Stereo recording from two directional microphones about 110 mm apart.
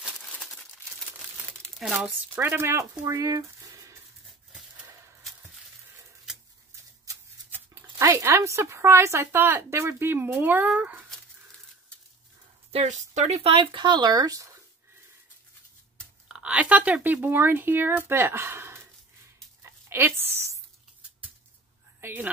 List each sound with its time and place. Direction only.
1.8 s speech: 10° right (ahead or behind)
2.3 s a woman's voice: 20° right (ahead or behind)
2.9 s speech: 35° right (ahead or behind)
8.0 s a woman's voice: 25° right (ahead or behind)
12.7 s speech: 85° right; by 14.6 s 30° right (ahead or behind)
16.3 s speech: 10° right (ahead or behind)
19.6 s a sound: 20° right (ahead or behind)
22.0 s a sound: 15° right (ahead or behind)